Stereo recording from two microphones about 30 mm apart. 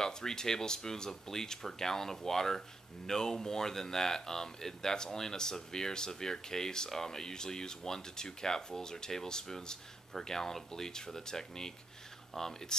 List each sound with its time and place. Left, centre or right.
0.0 s speech: centre